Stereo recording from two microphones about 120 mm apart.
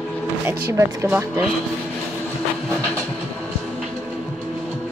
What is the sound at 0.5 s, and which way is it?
Speech, 20° right (ahead or behind).